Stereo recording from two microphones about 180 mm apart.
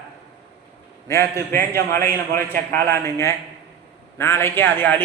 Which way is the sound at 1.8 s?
55° right (ahead or behind).